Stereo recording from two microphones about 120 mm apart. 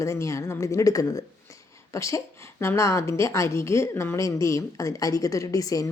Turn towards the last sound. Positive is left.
turn(degrees=30)  # may be behind; listen again after turning